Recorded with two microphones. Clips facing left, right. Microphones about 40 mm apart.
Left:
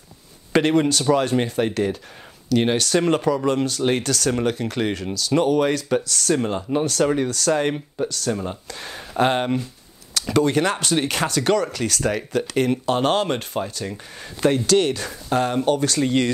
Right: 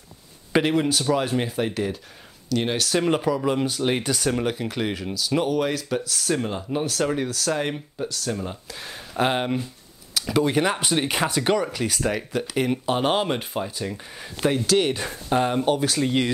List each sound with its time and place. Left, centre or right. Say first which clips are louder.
0.5 s speech: left 3 dB; centre
4.3 s speech: left 3 dB; centre
6.4 s speech: left 4 dB; centre
12.0 s speech: left 4 dB; centre
14.9 s speech: left 1 dB; centre